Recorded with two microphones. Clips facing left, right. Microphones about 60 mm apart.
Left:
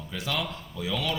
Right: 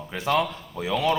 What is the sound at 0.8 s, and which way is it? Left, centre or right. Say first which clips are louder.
Speech: right 5 dB; right.